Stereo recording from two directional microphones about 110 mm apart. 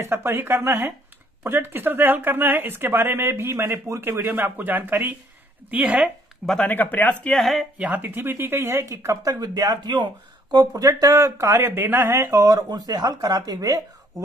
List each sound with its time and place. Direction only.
0.0 s speech: 25° right (ahead or behind)
6.6 s speech: 15° left (ahead or behind)
7.3 s speech: centre (ahead or behind)
7.7 s speech: 15° right (ahead or behind); by 13.7 s 35° right (ahead or behind)